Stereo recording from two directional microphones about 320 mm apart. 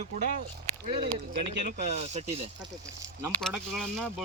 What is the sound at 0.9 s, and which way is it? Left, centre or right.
Speech, centre.